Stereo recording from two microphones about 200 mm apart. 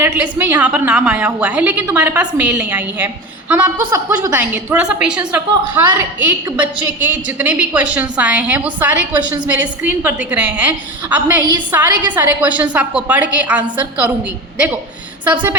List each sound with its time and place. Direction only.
0.0 s a woman's voice: 10° right (ahead or behind)
15.2 s a woman's voice: 5° right (ahead or behind)